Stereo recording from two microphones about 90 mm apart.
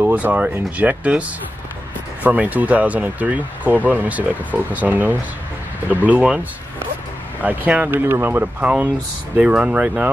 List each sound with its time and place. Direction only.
0.0 s speech: 15° right (ahead or behind)
2.2 s speech: 20° right (ahead or behind)
7.4 s speech: 15° right (ahead or behind)